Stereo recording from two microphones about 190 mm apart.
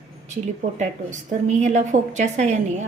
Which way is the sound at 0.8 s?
40° right (ahead or behind).